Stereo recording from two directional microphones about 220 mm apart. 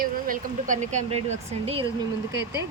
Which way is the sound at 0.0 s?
35° right (ahead or behind).